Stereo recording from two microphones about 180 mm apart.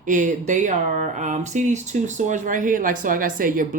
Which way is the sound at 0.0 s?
45° right (ahead or behind).